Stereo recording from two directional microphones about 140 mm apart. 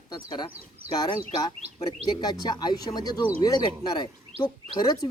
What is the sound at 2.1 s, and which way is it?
Speech, 30° left (ahead or behind).